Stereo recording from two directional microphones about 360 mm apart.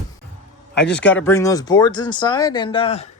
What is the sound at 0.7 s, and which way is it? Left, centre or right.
Speech, left.